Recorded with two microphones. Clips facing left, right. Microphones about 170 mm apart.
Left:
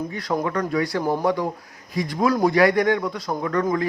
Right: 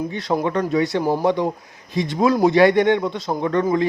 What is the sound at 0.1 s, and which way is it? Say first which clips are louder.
Speech: right 3 dB; 25° right (ahead or behind).